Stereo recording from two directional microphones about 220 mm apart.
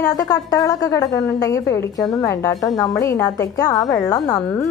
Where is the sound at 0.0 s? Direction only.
15° left (ahead or behind).